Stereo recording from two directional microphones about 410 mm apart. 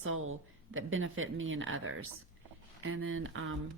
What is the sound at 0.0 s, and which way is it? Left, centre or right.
Speech, right.